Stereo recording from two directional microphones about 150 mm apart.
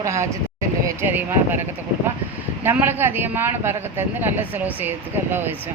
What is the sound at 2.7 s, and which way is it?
Speech, 15° right (ahead or behind).